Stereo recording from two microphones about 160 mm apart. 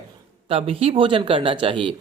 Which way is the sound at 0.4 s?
35° right (ahead or behind).